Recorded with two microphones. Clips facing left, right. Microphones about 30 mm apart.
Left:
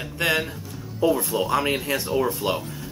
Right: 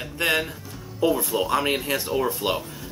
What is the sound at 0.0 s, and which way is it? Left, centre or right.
Music, centre.